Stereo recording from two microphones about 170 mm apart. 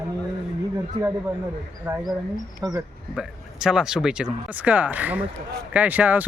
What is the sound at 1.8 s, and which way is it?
Speech, 10° right (ahead or behind).